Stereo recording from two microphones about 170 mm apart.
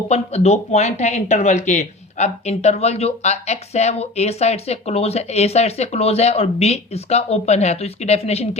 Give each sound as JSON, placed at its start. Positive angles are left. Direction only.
{"t": 0.1, "sound": "speech", "side_deg": 40}